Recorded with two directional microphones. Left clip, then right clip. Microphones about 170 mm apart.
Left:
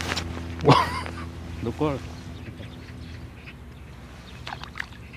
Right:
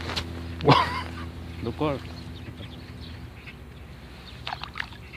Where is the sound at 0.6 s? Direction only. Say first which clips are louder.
Left 1 dB; 25° left (ahead or behind).